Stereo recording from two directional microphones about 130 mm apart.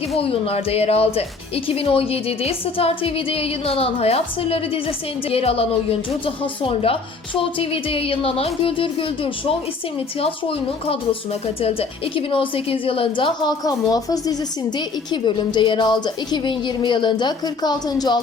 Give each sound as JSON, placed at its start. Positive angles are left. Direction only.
{"t": 0.2, "sound": "speech", "side_deg": 50}